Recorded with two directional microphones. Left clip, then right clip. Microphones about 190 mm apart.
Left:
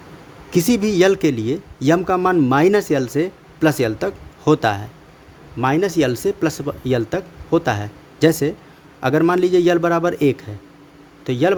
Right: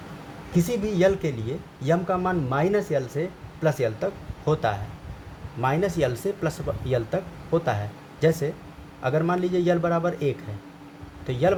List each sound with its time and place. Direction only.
0.5 s a man's voice: 55° left (ahead or behind)